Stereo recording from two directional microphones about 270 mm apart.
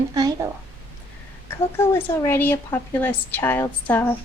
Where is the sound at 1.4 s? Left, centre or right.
Centre.